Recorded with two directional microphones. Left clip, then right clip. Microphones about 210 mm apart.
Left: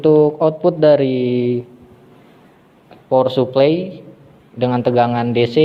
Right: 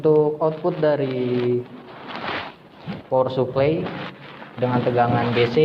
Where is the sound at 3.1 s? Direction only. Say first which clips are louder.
Left 6 dB; 55° left (ahead or behind).